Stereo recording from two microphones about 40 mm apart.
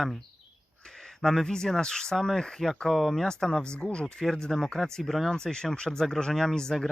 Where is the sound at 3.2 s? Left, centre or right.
Centre.